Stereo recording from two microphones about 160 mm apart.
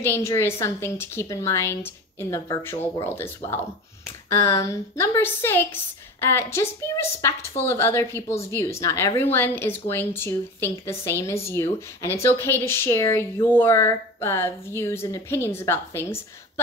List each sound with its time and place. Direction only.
0.0 s a woman's voice: 15° left (ahead or behind)